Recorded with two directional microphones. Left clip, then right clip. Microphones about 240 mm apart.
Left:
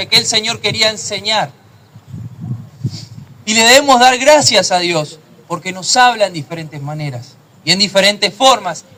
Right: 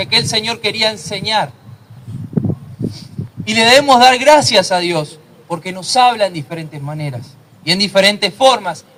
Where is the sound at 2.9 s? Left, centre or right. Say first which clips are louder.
Right 1 dB; left.